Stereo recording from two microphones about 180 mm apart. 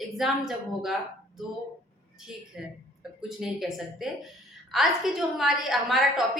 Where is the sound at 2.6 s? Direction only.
5° right (ahead or behind).